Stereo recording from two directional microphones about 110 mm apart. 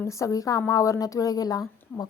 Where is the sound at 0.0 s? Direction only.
30° left (ahead or behind).